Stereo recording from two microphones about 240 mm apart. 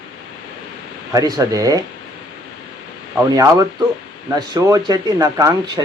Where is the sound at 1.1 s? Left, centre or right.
Centre.